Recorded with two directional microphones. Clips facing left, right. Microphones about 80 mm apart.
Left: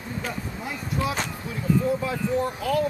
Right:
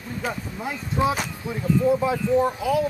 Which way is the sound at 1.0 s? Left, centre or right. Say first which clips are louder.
Right 5 dB; right.